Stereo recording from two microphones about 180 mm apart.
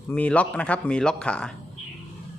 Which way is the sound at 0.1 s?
10° left (ahead or behind).